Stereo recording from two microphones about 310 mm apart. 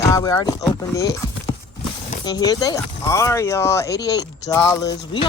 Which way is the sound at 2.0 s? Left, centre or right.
Centre.